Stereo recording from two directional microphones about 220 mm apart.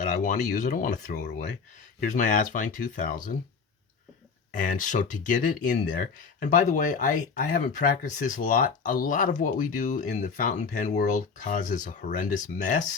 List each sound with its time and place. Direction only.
0.2 s speech: 35° left (ahead or behind)
4.6 s speech: 35° left (ahead or behind)